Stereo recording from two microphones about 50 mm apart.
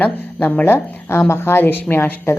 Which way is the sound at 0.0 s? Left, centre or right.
Left.